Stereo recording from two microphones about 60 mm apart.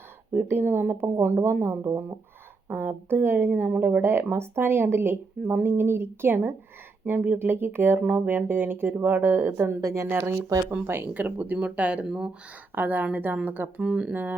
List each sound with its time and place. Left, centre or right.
0.3 s speech: right
3.5 s speech: right
9.8 s speech: right
10.8 s speech: right
11.1 s speech: right
12.0 s speech: centre
12.7 s speech: right
13.8 s speech: centre
14.1 s speech: right